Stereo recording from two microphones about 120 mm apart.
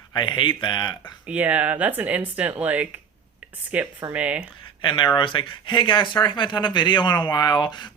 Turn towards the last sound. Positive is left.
turn(degrees=40)  # may be behind; listen again after turning